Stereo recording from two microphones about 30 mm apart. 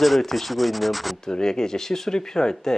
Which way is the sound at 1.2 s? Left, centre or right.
Left.